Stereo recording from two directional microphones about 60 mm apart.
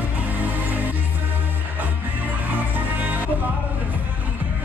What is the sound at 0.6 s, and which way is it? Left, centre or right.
Music, right.